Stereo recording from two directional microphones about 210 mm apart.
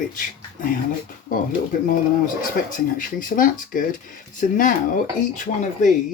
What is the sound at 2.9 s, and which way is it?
Speech, 40° left (ahead or behind).